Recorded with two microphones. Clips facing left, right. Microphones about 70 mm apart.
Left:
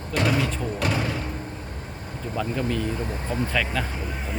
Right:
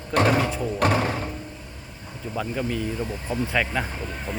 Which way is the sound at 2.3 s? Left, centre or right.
Centre.